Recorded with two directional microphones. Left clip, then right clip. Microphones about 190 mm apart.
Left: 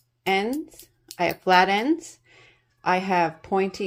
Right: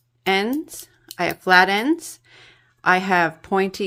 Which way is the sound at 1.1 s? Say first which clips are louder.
Right 3 dB; 15° right (ahead or behind).